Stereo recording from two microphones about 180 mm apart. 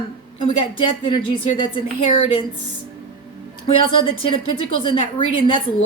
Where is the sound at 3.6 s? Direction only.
30° left (ahead or behind).